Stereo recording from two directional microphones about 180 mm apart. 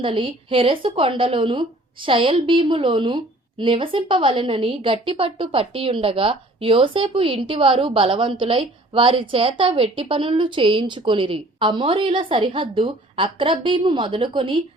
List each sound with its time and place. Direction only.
0.0 s a woman's voice: 30° right (ahead or behind)